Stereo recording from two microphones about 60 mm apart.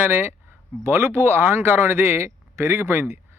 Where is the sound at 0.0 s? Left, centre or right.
Right.